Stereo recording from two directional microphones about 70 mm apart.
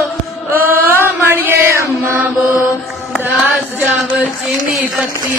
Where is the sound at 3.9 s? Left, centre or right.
Centre.